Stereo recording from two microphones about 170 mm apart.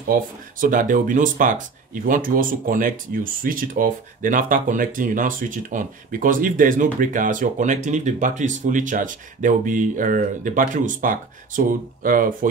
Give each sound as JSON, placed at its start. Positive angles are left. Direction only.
{"t": 0.1, "sound": "speech", "side_deg": -55}